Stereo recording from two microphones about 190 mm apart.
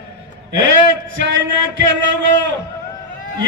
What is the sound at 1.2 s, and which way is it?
A man's voice, 75° right (ahead or behind).